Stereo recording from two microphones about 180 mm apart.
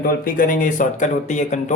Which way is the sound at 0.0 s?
55° left (ahead or behind).